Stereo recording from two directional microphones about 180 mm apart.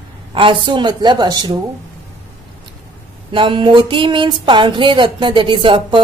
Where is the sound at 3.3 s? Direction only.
30° right (ahead or behind).